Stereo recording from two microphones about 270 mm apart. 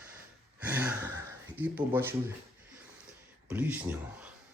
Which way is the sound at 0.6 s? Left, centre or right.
Centre.